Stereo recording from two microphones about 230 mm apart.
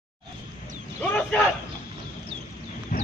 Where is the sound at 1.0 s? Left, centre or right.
Centre.